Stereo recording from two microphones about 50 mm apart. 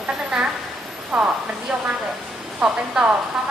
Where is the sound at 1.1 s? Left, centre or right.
Centre.